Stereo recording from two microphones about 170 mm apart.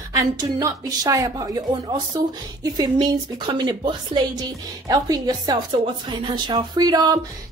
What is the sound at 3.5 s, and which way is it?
A woman's voice, 25° right (ahead or behind).